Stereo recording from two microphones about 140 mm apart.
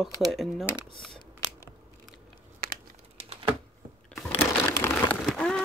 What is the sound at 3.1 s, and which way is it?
Computer keyboard, 40° right (ahead or behind).